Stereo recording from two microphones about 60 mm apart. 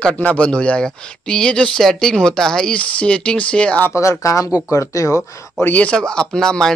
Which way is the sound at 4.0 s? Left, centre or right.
Left.